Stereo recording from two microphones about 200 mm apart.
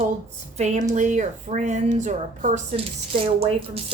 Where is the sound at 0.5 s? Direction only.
35° right (ahead or behind).